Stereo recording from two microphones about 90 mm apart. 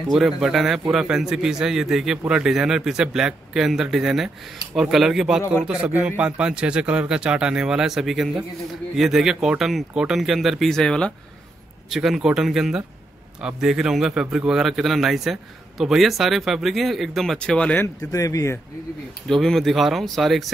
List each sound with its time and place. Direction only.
0.1 s a man's voice: centre (ahead or behind)
11.9 s a man's voice: 5° right (ahead or behind)
17.4 s speech: 10° left (ahead or behind)
18.1 s speech: 35° left (ahead or behind)
19.2 s a man's voice: 5° left (ahead or behind)